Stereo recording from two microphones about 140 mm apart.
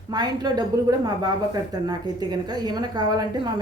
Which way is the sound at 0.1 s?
30° right (ahead or behind).